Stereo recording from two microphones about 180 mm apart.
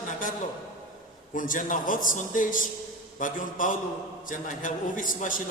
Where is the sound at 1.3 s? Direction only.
45° left (ahead or behind).